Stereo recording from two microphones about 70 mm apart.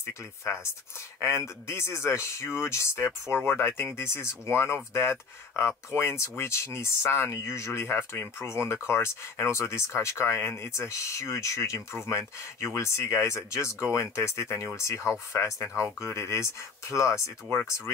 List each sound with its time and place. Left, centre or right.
1.2 s speech: left
3.3 s speech: left